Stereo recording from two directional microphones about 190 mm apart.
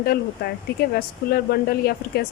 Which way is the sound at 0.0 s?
55° left (ahead or behind).